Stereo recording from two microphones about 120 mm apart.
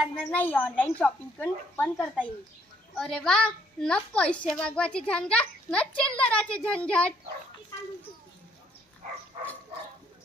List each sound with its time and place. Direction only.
0.0 s a child's voice: 5° left (ahead or behind)